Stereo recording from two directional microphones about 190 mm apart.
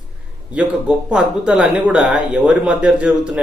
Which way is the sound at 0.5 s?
5° right (ahead or behind).